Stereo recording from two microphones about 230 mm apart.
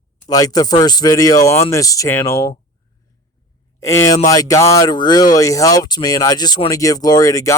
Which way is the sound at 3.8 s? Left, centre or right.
Centre.